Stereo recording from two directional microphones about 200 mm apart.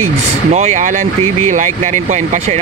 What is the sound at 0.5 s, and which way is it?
Speech, 35° right (ahead or behind).